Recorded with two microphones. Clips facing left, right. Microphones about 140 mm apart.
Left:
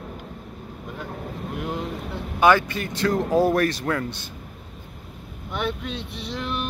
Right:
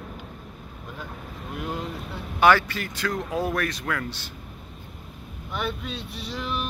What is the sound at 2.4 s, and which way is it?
Speech, 15° left (ahead or behind).